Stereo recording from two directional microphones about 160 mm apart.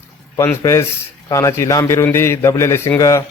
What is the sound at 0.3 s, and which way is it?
A man's voice, 15° left (ahead or behind).